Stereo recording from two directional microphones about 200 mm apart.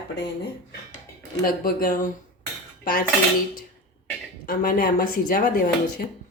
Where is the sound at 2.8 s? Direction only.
45° left (ahead or behind).